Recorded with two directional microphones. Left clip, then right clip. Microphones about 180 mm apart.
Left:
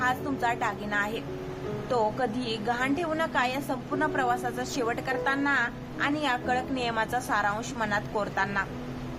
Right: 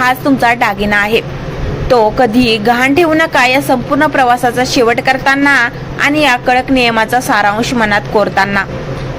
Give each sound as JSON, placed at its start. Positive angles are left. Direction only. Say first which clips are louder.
{"t": 0.0, "sound": "a woman's voice", "louder": "right 17 dB", "side_deg": -20}